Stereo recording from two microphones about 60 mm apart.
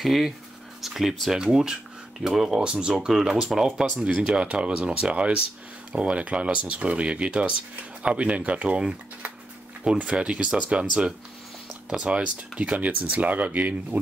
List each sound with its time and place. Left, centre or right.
0.0 s speech: centre
9.9 s speech: centre